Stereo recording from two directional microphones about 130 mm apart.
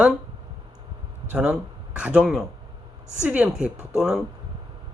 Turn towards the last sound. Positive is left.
turn(degrees=-5)  # may be behind; listen again after turning